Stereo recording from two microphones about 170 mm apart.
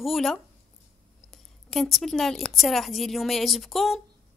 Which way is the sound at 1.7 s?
Centre (ahead or behind).